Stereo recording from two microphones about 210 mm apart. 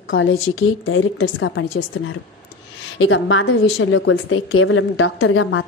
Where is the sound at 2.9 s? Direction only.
75° left (ahead or behind).